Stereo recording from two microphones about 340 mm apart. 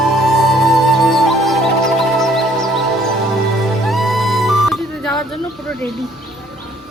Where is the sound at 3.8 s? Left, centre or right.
Centre.